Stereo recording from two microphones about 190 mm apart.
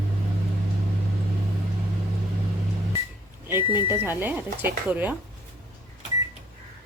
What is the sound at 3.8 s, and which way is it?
Speech, 10° right (ahead or behind).